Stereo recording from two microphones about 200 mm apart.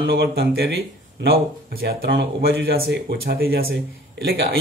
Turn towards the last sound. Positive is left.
turn(degrees=-55)  # may be behind; listen again after turning